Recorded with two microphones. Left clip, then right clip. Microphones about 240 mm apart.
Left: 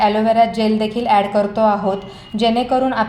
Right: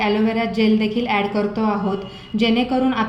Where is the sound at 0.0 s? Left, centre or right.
Left.